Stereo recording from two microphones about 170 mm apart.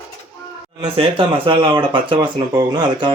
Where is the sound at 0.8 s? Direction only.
30° right (ahead or behind).